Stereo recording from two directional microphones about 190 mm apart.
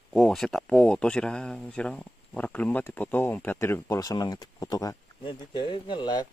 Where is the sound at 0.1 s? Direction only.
Centre (ahead or behind); by 6.2 s 25° left (ahead or behind).